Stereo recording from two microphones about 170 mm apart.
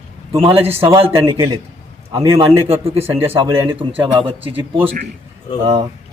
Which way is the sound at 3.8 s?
35° right (ahead or behind).